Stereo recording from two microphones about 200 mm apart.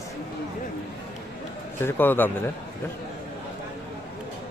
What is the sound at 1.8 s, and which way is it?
Speech, 10° left (ahead or behind).